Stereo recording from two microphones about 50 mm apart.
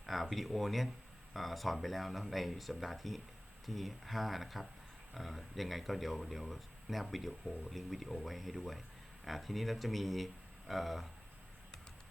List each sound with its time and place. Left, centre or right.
0.0 s speech: centre